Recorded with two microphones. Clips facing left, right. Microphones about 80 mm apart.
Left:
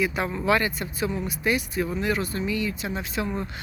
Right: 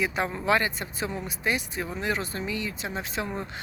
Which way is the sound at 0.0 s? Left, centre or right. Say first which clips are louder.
Left 2 dB; right.